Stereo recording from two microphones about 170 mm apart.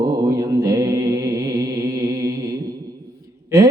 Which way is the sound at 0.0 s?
25° right (ahead or behind).